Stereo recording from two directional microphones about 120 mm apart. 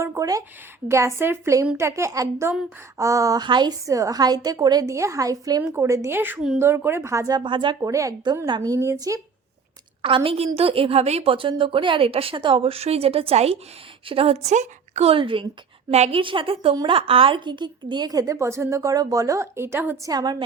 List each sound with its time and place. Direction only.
0.0 s a woman's voice: 25° right (ahead or behind)
7.3 s a woman's voice: 45° right (ahead or behind)
7.8 s a woman's voice: 25° right (ahead or behind)
10.0 s a woman's voice: 45° right (ahead or behind); by 15.1 s 80° right
15.1 s a woman's voice: 45° right (ahead or behind)
15.9 s a woman's voice: 65° right (ahead or behind)
16.2 s a woman's voice: 45° right (ahead or behind); by 20.1 s 20° right (ahead or behind)
20.1 s a woman's voice: 35° right (ahead or behind)